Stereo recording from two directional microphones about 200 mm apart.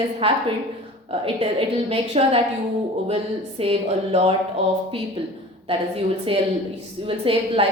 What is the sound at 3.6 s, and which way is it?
Speech, 30° right (ahead or behind).